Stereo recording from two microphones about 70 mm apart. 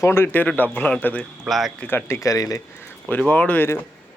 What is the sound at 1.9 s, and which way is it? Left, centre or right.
Speech, left.